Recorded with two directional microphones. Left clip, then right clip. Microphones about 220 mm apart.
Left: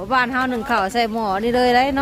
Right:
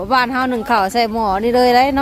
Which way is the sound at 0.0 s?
15° right (ahead or behind).